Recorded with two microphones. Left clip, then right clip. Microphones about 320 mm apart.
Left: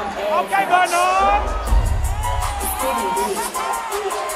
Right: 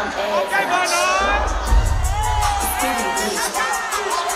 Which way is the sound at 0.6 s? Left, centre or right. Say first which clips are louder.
Left 4 dB; left.